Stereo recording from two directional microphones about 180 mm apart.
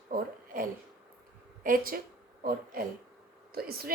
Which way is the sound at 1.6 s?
50° right (ahead or behind).